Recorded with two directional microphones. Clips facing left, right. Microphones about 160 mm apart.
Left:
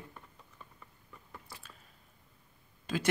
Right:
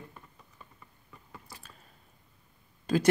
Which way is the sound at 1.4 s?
40° right (ahead or behind).